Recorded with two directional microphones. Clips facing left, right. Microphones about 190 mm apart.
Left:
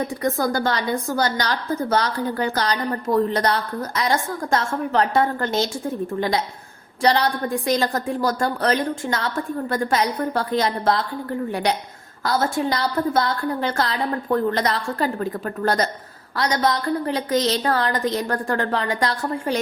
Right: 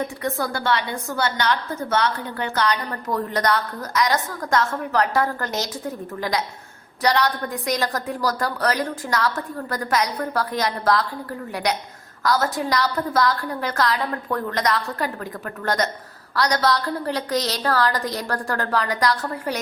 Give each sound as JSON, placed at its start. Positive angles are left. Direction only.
{"t": 0.2, "sound": "a woman's voice", "side_deg": 40}